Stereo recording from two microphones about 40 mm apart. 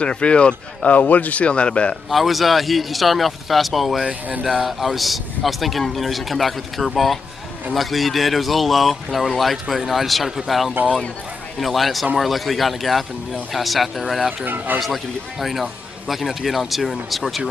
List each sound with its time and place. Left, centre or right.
0.0 s speech: left
0.9 s speech: left
2.0 s a man's voice: centre
10.8 s speech: right
11.6 s a man's voice: centre
14.4 s speech: right
14.8 s a man's voice: centre